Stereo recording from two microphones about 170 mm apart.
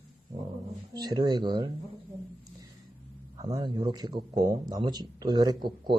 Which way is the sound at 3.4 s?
25° right (ahead or behind).